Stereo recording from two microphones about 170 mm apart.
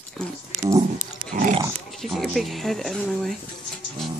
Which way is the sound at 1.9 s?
Centre (ahead or behind).